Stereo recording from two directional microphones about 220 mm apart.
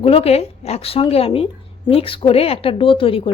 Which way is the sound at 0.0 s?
25° left (ahead or behind).